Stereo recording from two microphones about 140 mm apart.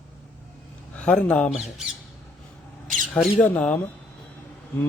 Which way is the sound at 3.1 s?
Centre (ahead or behind).